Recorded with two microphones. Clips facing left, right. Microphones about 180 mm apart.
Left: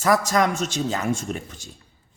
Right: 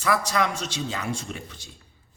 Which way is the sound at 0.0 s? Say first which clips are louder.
Left 4 dB; 45° left (ahead or behind).